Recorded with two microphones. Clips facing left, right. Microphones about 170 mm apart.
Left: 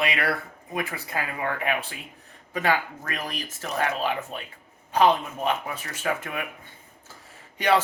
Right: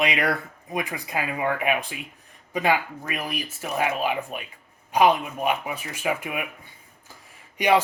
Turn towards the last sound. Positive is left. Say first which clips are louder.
# right 2 dB
turn(degrees=-15)  # may be behind; listen again after turning